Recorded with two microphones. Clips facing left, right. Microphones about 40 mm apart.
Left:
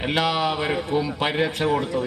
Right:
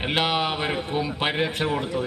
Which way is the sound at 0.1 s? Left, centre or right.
Right.